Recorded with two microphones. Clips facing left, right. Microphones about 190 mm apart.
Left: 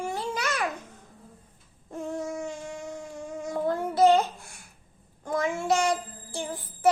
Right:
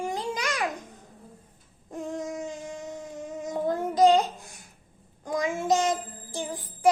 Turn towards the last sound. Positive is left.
turn(degrees=-15)  # may be behind; listen again after turning